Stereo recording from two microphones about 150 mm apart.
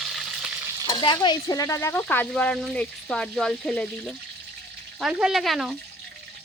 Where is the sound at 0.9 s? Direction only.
30° left (ahead or behind).